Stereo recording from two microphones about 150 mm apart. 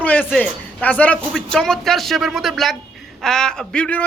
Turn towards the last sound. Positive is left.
turn(degrees=5)  # may be behind; listen again after turning